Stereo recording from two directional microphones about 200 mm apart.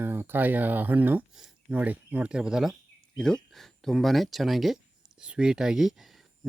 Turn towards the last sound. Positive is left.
turn(degrees=0)  # may be behind; listen again after turning